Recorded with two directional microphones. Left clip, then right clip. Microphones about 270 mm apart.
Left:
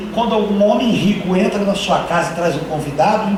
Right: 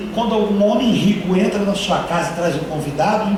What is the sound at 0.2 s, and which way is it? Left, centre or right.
Speech, right.